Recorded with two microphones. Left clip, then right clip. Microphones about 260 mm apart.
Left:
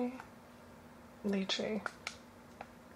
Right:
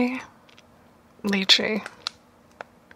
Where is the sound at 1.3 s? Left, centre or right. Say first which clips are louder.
Right 16 dB; right.